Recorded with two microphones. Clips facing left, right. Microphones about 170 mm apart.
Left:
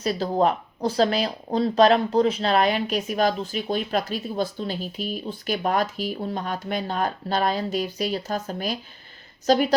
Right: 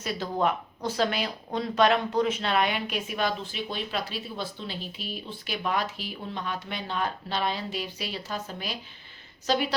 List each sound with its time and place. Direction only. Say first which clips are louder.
0.0 s speech: left 6 dB; 35° left (ahead or behind)